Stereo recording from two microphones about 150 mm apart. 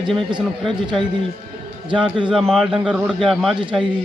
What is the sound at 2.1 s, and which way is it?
Speech, 35° right (ahead or behind).